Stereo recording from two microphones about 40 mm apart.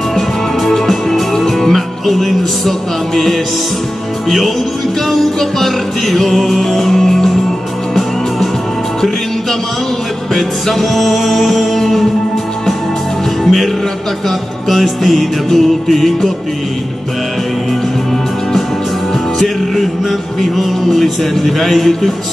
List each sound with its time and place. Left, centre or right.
0.1 s music: centre
5.0 s music: centre
10.3 s music: centre
13.4 s music: centre
14.7 s music: centre
19.3 s music: centre